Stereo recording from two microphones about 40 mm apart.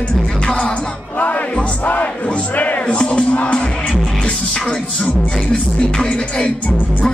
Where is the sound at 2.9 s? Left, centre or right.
Left.